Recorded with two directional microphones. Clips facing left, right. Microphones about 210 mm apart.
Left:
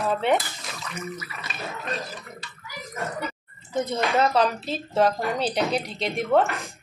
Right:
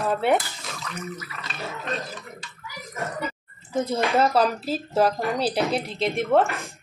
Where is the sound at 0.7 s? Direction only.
5° left (ahead or behind).